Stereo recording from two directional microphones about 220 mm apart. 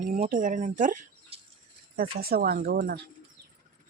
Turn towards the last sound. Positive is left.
turn(degrees=-45)  # may be behind; listen again after turning